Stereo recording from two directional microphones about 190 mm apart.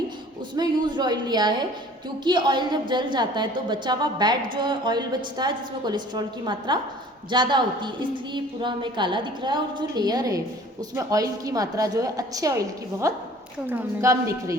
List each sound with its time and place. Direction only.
0.5 s a woman's voice: 20° right (ahead or behind)